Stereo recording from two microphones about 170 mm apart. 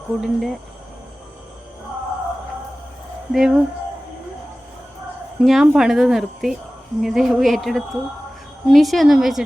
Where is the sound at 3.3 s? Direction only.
5° right (ahead or behind).